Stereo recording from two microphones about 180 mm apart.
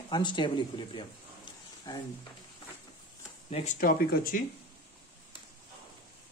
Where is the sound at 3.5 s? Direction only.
35° left (ahead or behind).